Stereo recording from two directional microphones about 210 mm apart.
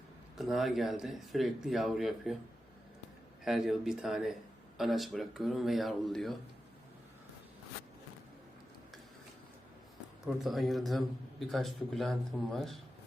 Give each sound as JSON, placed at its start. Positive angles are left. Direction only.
{"t": 0.3, "sound": "a man's voice", "side_deg": 0}
{"t": 3.4, "sound": "a man's voice", "side_deg": 0}
{"t": 10.2, "sound": "a man's voice", "side_deg": 0}